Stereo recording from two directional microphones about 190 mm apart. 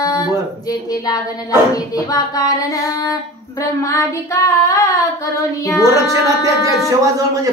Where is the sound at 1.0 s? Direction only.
20° left (ahead or behind).